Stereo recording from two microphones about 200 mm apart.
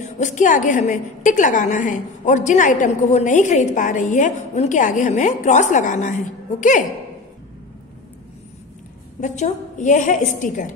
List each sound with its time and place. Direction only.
0.0 s a woman's voice: 35° left (ahead or behind)
9.2 s a woman's voice: 35° left (ahead or behind)